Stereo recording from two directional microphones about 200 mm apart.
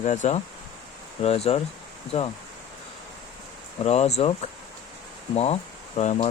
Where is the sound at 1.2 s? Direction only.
30° left (ahead or behind).